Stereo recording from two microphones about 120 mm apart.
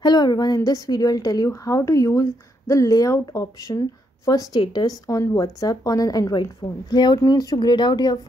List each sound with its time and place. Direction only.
0.0 s a woman's voice: 35° left (ahead or behind)